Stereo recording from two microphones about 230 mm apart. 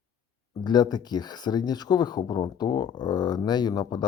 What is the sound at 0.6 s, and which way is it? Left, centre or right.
Speech, centre.